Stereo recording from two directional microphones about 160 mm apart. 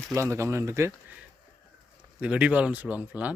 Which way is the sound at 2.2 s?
10° right (ahead or behind).